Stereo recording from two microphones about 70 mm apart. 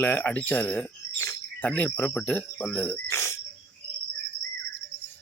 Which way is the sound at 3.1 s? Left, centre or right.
Left.